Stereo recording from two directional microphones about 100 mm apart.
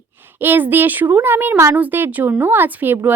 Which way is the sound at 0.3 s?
20° right (ahead or behind).